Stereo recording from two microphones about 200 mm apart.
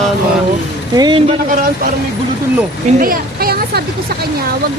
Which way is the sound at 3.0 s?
45° right (ahead or behind).